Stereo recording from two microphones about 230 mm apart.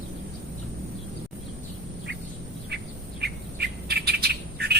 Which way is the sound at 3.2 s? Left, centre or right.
Right.